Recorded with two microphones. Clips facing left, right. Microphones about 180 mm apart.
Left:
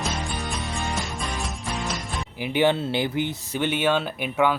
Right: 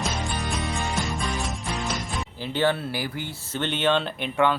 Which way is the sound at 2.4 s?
15° left (ahead or behind).